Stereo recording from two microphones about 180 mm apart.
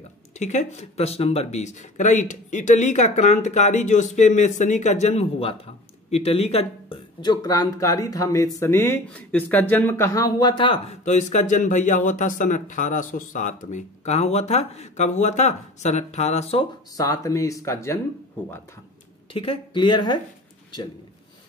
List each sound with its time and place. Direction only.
0.4 s speech: 40° left (ahead or behind)
16.9 s speech: 20° left (ahead or behind)
19.3 s speech: 30° left (ahead or behind)